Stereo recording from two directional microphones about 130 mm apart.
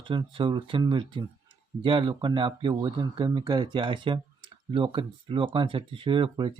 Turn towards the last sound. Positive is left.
turn(degrees=-40)  # may be behind; listen again after turning